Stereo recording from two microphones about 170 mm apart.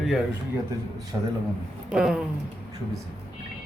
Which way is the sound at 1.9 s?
5° right (ahead or behind).